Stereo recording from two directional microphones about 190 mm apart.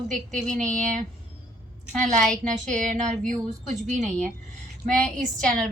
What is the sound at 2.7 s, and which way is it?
Speech, 40° right (ahead or behind).